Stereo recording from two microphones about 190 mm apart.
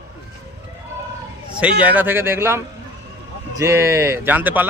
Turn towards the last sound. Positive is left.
turn(degrees=-10)  # may be behind; listen again after turning